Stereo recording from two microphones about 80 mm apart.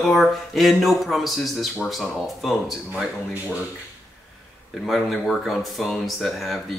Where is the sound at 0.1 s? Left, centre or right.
Centre.